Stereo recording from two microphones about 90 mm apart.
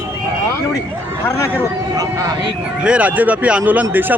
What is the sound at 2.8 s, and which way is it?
A man's voice, 15° right (ahead or behind).